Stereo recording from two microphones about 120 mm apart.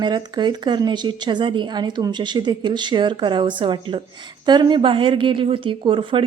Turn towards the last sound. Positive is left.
turn(degrees=-45)  # may be behind; listen again after turning